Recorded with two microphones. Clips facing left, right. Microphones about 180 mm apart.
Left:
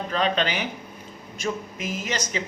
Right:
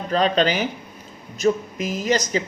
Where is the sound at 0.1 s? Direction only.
40° right (ahead or behind).